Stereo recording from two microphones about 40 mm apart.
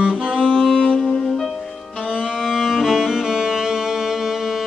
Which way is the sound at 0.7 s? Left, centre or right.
Left.